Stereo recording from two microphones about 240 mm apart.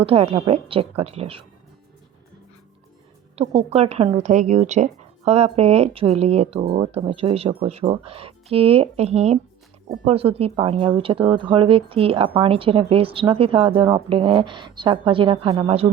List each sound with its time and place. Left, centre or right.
0.0 s speech: right
3.3 s speech: right